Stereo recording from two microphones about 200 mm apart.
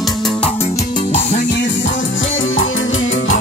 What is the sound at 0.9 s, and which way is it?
Music, 35° left (ahead or behind).